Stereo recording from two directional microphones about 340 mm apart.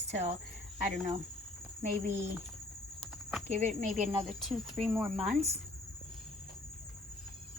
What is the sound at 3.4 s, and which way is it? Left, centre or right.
Speech, centre.